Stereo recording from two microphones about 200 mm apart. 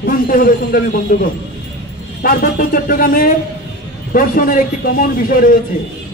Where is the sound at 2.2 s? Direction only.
45° left (ahead or behind).